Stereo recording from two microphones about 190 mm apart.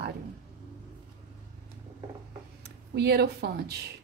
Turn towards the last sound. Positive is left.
turn(degrees=-60)  # may be behind; listen again after turning